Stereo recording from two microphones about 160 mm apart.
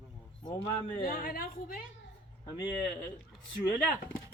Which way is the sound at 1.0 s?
65° left (ahead or behind).